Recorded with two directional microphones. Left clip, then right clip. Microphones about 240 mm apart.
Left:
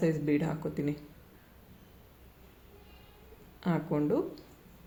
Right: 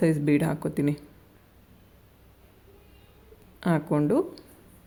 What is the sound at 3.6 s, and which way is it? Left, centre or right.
Speech, right.